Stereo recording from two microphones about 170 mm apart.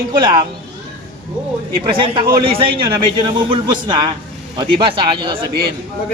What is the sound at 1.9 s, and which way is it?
A man's voice, 30° right (ahead or behind).